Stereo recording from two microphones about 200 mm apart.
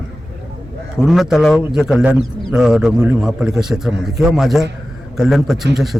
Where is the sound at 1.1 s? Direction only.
Centre (ahead or behind).